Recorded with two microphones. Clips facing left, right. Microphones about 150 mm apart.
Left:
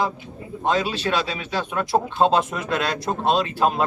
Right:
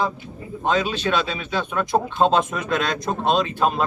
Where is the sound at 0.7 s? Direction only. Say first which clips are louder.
Right 1 dB; 5° left (ahead or behind).